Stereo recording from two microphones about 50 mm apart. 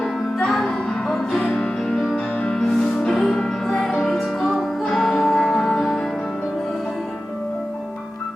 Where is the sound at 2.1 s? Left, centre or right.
Left.